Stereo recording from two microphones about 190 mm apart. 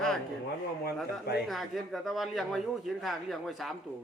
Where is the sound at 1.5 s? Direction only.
Centre (ahead or behind).